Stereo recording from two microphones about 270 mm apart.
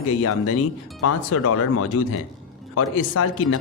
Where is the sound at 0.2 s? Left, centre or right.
Left.